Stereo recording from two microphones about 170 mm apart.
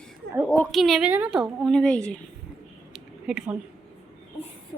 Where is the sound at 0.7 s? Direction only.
Centre (ahead or behind).